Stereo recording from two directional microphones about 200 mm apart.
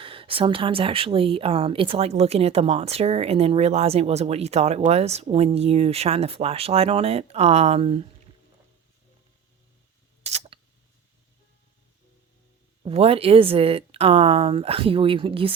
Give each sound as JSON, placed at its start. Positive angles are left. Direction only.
{"t": 0.0, "sound": "a woman's voice", "side_deg": -25}
{"t": 10.2, "sound": "a sound", "side_deg": -30}
{"t": 12.8, "sound": "speech", "side_deg": -30}